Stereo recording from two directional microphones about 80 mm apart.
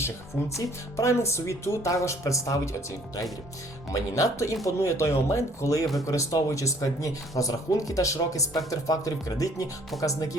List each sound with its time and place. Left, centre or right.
0.0 s speech: left
3.9 s speech: left